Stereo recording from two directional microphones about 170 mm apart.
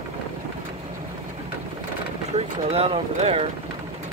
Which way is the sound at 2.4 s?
35° right (ahead or behind).